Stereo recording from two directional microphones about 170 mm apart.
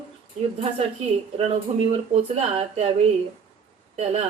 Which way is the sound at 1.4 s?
40° right (ahead or behind).